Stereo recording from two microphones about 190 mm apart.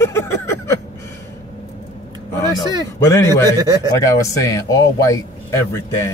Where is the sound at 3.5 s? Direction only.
20° right (ahead or behind).